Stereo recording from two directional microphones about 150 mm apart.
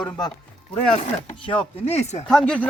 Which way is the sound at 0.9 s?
45° left (ahead or behind).